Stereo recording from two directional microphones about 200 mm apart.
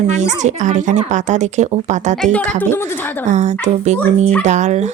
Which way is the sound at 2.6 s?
10° left (ahead or behind).